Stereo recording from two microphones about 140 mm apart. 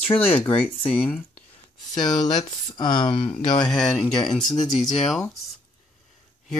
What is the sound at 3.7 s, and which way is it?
Speech, centre (ahead or behind).